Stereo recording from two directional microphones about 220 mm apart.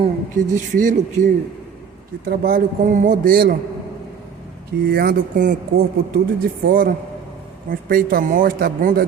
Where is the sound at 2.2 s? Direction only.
45° right (ahead or behind).